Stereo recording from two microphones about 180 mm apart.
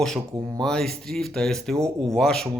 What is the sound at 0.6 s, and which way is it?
Speech, 5° left (ahead or behind).